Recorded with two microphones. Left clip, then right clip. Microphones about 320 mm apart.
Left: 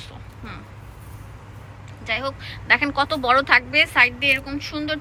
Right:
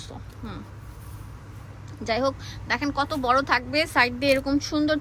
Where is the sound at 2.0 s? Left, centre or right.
Centre.